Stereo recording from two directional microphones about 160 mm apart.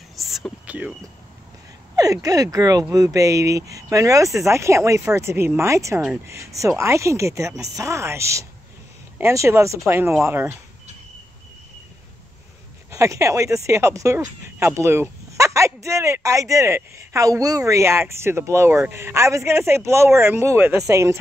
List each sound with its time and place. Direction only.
0.1 s whispering: centre (ahead or behind)
2.0 s speech: 20° right (ahead or behind)
12.9 s speech: 20° right (ahead or behind)